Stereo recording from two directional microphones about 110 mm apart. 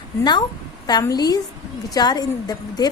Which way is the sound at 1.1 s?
35° left (ahead or behind).